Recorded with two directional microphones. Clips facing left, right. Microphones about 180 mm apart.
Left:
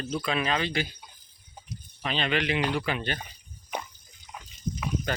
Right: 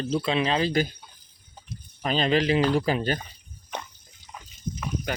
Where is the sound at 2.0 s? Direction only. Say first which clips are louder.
Right 5 dB; 40° right (ahead or behind).